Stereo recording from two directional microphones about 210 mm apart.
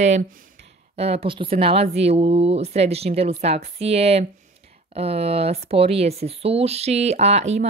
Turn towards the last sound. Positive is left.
turn(degrees=-30)  # may be behind; listen again after turning